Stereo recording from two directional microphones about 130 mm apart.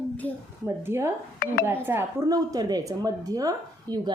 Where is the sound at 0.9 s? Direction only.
20° right (ahead or behind).